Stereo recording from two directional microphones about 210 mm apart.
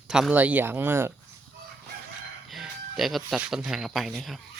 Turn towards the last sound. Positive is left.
turn(degrees=0)  # may be behind; listen again after turning